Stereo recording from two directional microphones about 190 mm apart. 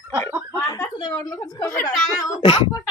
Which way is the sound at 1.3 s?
20° left (ahead or behind).